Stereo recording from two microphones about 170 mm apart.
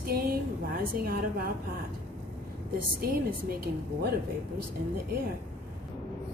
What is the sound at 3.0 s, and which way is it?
Speech, 60° right (ahead or behind).